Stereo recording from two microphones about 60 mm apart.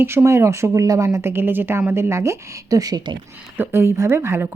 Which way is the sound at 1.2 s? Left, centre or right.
Right.